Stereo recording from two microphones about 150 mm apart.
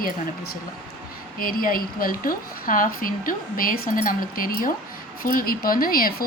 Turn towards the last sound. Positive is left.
turn(degrees=75)  # may be behind; listen again after turning